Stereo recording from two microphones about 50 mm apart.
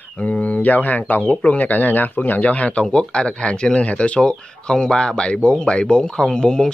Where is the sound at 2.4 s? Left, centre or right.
Left.